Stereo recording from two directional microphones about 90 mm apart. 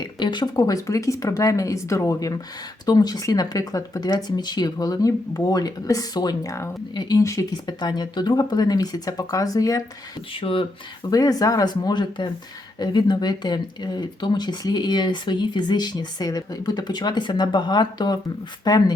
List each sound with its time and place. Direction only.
0.2 s speech: 55° left (ahead or behind); by 6.7 s 40° left (ahead or behind)
6.9 s speech: 55° left (ahead or behind)
7.2 s speech: 35° left (ahead or behind)
7.8 s speech: 50° left (ahead or behind)
10.3 s speech: 75° left (ahead or behind)
11.1 s speech: 40° left (ahead or behind)